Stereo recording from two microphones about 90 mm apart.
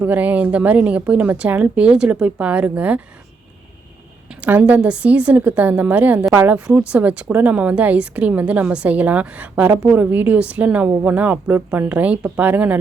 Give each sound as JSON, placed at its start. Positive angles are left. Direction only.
{"t": 0.0, "sound": "a woman's voice", "side_deg": -20}
{"t": 4.3, "sound": "a woman's voice", "side_deg": -15}